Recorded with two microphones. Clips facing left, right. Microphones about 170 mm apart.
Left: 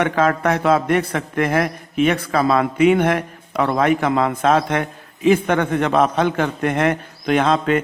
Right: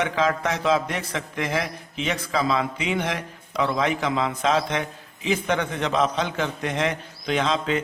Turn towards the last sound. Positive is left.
turn(degrees=55)  # may be behind; listen again after turning